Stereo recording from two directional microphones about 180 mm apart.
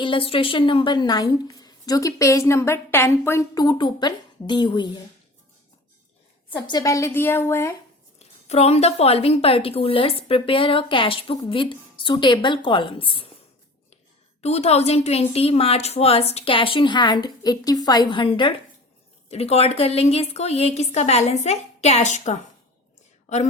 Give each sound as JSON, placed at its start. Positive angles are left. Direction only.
{"t": 0.0, "sound": "a woman's voice", "side_deg": 30}
{"t": 6.7, "sound": "a woman's voice", "side_deg": 20}
{"t": 8.4, "sound": "a woman's voice", "side_deg": 35}
{"t": 14.4, "sound": "a woman's voice", "side_deg": 35}